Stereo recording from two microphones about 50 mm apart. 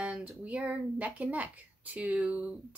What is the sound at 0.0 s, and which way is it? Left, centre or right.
Speech, right.